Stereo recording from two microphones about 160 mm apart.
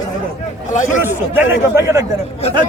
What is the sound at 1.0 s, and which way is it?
A man's voice, 10° right (ahead or behind).